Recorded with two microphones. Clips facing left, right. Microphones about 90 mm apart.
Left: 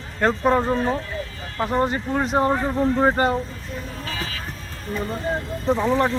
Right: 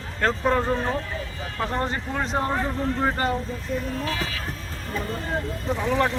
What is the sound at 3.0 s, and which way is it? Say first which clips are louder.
Speech: left 5 dB; 30° left (ahead or behind).